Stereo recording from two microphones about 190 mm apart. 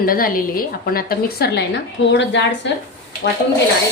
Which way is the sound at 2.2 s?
70° left (ahead or behind).